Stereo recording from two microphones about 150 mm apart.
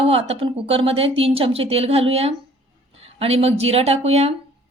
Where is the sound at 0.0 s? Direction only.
40° right (ahead or behind).